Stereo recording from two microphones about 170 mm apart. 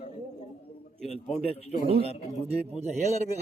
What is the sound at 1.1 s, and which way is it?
Speech, 40° left (ahead or behind).